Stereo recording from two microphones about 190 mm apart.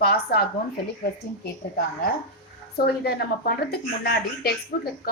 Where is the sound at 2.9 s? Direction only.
55° left (ahead or behind).